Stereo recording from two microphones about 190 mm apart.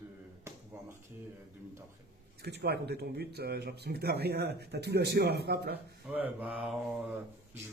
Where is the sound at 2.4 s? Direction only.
60° right (ahead or behind).